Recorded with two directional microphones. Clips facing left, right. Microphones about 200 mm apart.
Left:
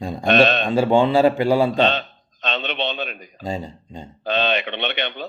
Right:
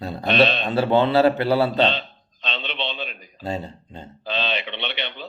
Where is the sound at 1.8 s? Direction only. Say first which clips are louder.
Left 2 dB; 50° left (ahead or behind).